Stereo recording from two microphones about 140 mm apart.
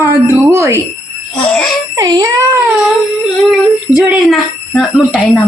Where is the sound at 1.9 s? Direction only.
25° right (ahead or behind).